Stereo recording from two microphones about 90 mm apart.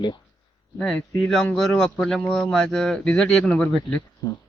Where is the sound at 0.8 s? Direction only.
10° left (ahead or behind).